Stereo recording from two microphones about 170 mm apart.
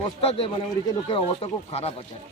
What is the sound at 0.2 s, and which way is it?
A man's voice, 35° left (ahead or behind).